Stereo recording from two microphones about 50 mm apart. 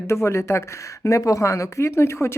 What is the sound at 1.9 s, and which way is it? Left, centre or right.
Speech, left.